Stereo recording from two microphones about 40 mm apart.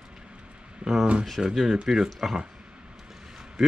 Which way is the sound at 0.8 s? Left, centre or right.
Right.